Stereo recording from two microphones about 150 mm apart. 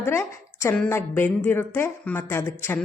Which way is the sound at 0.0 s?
20° left (ahead or behind).